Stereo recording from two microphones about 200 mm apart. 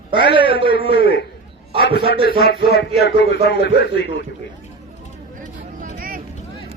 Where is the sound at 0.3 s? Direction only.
25° right (ahead or behind).